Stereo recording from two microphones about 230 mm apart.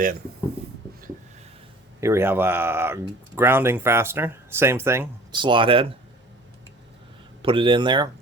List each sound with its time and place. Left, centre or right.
2.0 s speech: centre
7.4 s speech: right